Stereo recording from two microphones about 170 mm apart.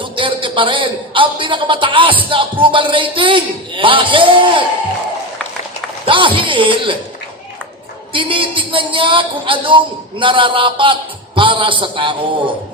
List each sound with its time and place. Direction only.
0.0 s a man's voice: 30° right (ahead or behind)
6.1 s speech: 30° right (ahead or behind)
8.1 s speech: 30° right (ahead or behind)